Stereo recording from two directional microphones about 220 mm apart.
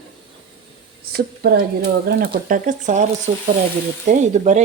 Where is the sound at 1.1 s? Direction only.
45° right (ahead or behind).